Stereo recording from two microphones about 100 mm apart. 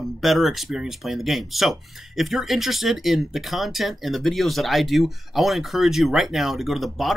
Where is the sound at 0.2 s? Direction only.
Centre (ahead or behind).